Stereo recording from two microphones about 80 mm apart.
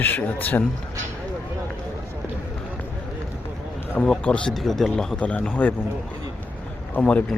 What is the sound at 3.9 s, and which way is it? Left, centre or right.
Speech, centre.